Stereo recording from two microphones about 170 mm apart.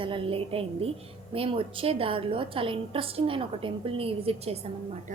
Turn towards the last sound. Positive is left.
turn(degrees=-40)  # may be behind; listen again after turning